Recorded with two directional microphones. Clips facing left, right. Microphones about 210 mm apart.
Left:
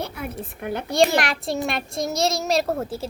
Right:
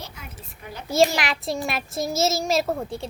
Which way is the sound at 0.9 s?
Centre (ahead or behind).